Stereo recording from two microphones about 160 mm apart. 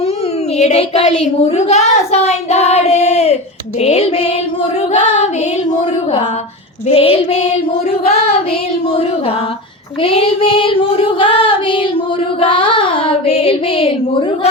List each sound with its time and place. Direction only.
0.6 s speech: 40° left (ahead or behind)
4.9 s child singing: 45° left (ahead or behind)
6.8 s speech: 35° left (ahead or behind)
10.0 s speech: 35° left (ahead or behind)